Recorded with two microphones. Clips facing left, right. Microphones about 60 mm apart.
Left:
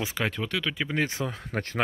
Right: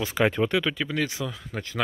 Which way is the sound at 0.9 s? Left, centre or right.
Left.